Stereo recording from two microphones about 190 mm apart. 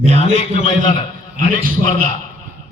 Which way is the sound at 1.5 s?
45° right (ahead or behind).